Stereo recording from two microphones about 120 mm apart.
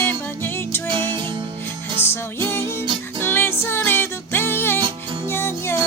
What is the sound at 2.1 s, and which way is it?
Music, 20° left (ahead or behind).